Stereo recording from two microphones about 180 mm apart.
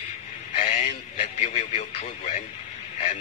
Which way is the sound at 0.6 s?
45° left (ahead or behind).